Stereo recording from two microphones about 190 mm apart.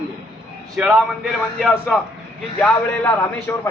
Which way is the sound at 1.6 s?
5° left (ahead or behind).